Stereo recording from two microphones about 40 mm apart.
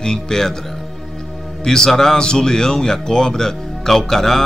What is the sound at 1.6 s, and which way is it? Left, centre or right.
Speech, centre.